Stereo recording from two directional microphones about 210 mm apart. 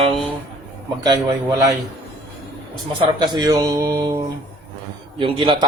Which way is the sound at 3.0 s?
20° right (ahead or behind).